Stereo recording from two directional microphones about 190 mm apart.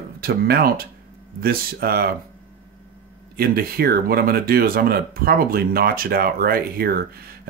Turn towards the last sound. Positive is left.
turn(degrees=-50)  # may be behind; listen again after turning